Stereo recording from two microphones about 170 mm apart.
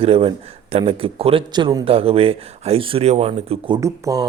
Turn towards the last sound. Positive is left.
turn(degrees=-20)  # may be behind; listen again after turning